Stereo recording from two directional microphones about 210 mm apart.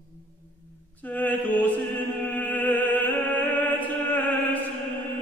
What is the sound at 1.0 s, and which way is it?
Mantra, 10° left (ahead or behind).